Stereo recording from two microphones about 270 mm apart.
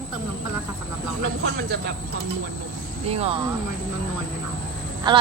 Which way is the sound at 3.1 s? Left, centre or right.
Right.